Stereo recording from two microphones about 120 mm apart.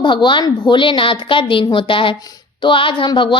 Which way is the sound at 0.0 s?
40° left (ahead or behind).